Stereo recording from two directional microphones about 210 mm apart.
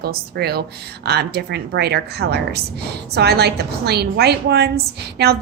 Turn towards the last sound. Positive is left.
turn(degrees=-50)  # may be behind; listen again after turning